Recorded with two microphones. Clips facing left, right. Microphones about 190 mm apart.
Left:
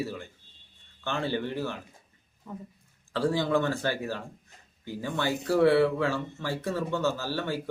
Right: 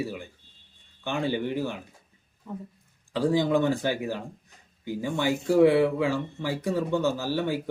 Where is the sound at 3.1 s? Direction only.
15° right (ahead or behind).